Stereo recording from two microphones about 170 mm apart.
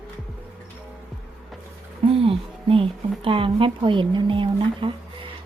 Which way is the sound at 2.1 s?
35° right (ahead or behind).